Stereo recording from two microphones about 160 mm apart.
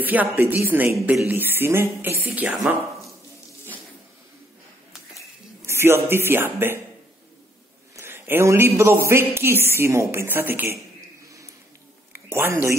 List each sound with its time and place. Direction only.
0.0 s a woman's voice: 10° right (ahead or behind)
5.7 s a woman's voice: 15° right (ahead or behind)
7.9 s a man's voice: 15° right (ahead or behind)
12.1 s a sound: 15° right (ahead or behind)